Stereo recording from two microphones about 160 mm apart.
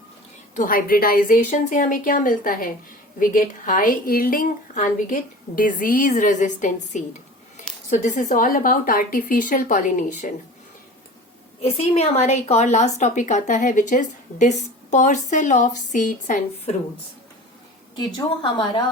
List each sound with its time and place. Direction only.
0.5 s a woman's voice: 60° left (ahead or behind)
11.6 s a woman's voice: 40° left (ahead or behind)
18.5 s a woman's voice: 30° left (ahead or behind)